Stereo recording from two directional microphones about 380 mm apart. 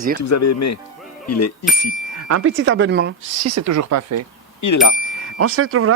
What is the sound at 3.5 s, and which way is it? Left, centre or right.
Speech, right.